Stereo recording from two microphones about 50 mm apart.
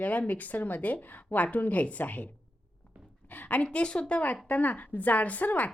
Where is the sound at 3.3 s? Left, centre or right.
Left.